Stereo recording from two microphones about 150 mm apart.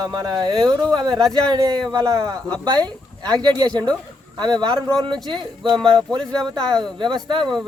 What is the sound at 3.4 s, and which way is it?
Speech, 30° right (ahead or behind).